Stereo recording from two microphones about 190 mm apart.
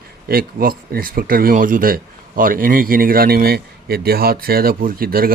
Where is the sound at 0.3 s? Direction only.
50° right (ahead or behind).